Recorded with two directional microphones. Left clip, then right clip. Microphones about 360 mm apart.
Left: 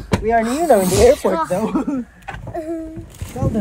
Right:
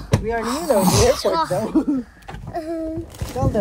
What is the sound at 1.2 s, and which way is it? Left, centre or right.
Speech, left.